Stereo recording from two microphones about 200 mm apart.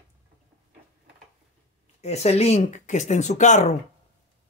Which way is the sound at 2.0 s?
35° left (ahead or behind).